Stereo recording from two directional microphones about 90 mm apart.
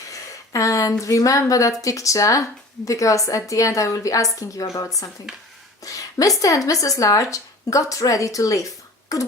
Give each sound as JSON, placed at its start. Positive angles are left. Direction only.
{"t": 0.1, "sound": "a woman's voice", "side_deg": 35}
{"t": 5.8, "sound": "a sound", "side_deg": 40}
{"t": 6.4, "sound": "a woman's voice", "side_deg": 40}